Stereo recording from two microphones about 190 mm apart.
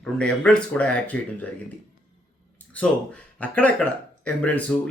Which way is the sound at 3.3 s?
5° left (ahead or behind).